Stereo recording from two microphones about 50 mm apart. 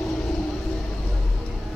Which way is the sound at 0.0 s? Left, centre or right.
Centre.